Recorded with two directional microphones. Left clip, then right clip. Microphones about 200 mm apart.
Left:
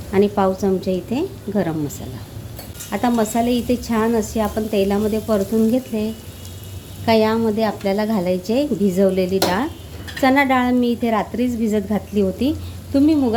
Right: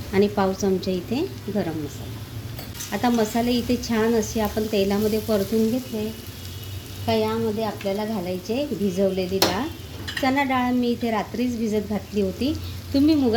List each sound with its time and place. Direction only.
0.1 s a woman's voice: 5° left (ahead or behind)
2.9 s a woman's voice: 5° left (ahead or behind)
7.0 s a woman's voice: 25° left (ahead or behind); by 13.3 s 5° left (ahead or behind)